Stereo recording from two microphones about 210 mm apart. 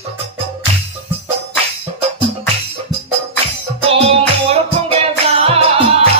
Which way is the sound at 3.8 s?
30° right (ahead or behind).